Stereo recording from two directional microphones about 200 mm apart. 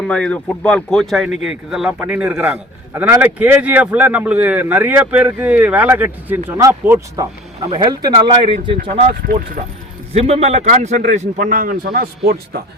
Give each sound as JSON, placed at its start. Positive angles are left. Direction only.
{"t": 0.1, "sound": "a man's voice", "side_deg": 5}
{"t": 9.0, "sound": "a man's voice", "side_deg": -40}
{"t": 10.1, "sound": "a man's voice", "side_deg": -30}